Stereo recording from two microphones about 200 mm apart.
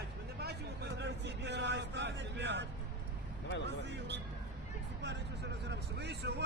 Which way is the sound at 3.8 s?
60° right (ahead or behind).